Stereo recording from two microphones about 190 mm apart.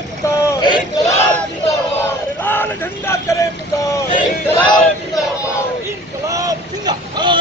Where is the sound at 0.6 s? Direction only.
20° left (ahead or behind).